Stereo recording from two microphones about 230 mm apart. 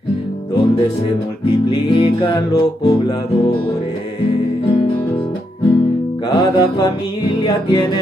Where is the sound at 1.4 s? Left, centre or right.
Left.